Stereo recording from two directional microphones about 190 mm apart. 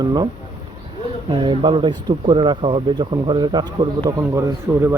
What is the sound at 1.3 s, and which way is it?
Speech, 25° right (ahead or behind).